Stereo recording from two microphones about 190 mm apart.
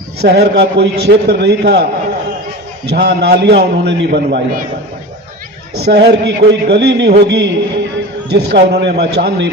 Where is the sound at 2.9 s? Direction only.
60° right (ahead or behind).